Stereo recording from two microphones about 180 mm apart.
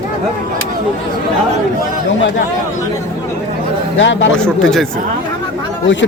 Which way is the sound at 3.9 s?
90° left.